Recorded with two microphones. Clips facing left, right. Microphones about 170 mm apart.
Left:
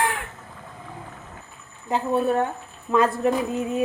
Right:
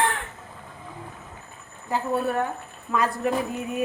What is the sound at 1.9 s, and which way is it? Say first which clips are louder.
Speech: left 3 dB; 25° left (ahead or behind).